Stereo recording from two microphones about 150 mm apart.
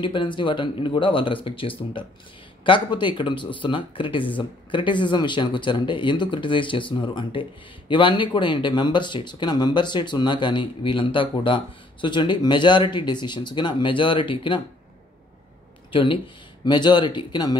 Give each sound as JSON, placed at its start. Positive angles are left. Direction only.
{"t": 0.0, "sound": "speech", "side_deg": 30}
{"t": 15.9, "sound": "speech", "side_deg": 35}